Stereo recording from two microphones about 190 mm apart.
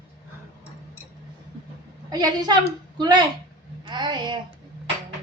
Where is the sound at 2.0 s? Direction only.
20° right (ahead or behind).